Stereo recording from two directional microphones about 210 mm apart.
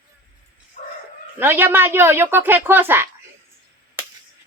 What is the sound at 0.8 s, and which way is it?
Chicken, 35° left (ahead or behind).